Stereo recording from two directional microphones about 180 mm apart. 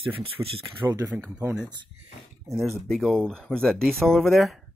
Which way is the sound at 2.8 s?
Centre (ahead or behind).